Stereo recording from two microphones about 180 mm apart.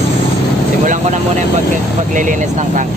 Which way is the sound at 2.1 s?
45° right (ahead or behind).